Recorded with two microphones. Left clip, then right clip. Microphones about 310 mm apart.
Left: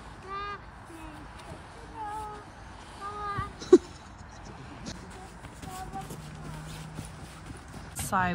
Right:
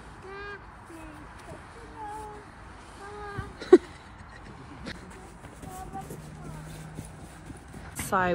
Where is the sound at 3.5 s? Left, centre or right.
Centre.